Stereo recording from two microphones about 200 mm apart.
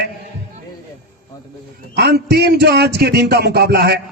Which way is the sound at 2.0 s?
55° right (ahead or behind).